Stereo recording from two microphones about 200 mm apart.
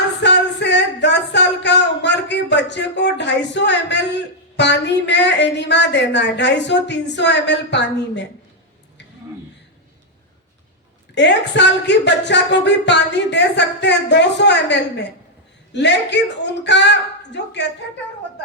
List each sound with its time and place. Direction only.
0.2 s a sound: 60° left (ahead or behind)
4.5 s speech: 60° left (ahead or behind)
11.1 s speech: 60° left (ahead or behind)